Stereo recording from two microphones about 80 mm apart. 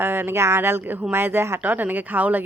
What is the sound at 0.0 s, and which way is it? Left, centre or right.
Speech, right.